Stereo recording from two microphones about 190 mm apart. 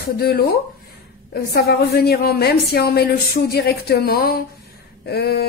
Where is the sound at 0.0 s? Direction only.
55° left (ahead or behind).